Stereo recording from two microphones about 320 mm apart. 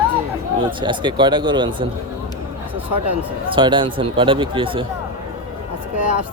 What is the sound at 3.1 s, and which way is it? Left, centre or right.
Speech, centre.